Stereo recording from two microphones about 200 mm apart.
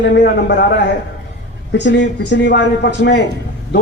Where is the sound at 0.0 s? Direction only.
60° left (ahead or behind).